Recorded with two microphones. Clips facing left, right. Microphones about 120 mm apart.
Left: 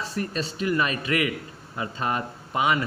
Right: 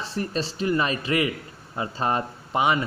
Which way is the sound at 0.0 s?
30° right (ahead or behind).